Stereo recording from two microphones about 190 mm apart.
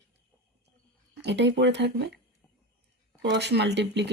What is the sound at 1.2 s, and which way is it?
Speech, 65° right (ahead or behind).